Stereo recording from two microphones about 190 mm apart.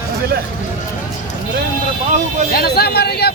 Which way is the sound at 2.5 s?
55° left (ahead or behind).